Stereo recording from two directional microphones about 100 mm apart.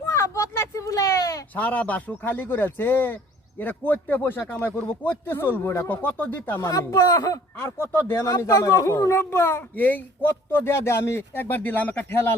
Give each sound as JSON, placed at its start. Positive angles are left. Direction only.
{"t": 0.0, "sound": "a sound", "side_deg": 30}
{"t": 1.5, "sound": "speech", "side_deg": 15}
{"t": 6.7, "sound": "speech", "side_deg": 35}
{"t": 7.6, "sound": "speech", "side_deg": 25}